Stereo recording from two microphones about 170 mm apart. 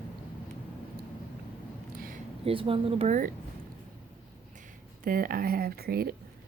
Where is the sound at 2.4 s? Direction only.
30° right (ahead or behind).